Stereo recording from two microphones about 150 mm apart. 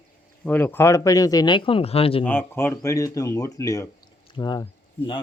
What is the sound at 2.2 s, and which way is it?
A man's voice, 15° left (ahead or behind).